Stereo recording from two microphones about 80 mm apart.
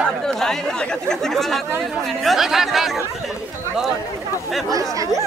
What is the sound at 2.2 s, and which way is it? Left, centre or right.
Speech, centre.